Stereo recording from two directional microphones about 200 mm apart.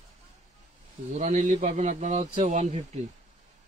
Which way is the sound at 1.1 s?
40° right (ahead or behind).